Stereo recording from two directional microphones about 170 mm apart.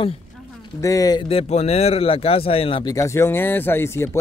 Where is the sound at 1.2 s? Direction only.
35° left (ahead or behind).